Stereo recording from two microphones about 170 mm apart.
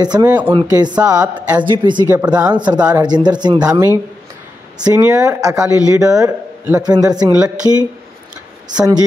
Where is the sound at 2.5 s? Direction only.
25° right (ahead or behind).